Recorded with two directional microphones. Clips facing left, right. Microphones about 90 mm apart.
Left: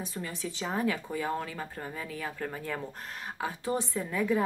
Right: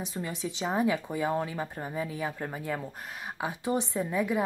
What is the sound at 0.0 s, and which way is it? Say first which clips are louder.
Speech: right 2 dB; 20° right (ahead or behind).